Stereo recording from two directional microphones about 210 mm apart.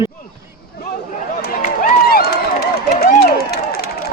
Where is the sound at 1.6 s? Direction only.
45° left (ahead or behind).